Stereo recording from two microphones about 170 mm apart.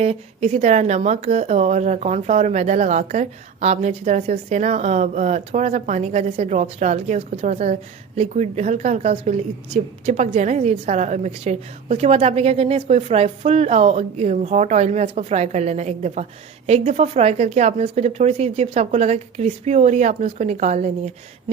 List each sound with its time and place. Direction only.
0.0 s speech: 40° right (ahead or behind)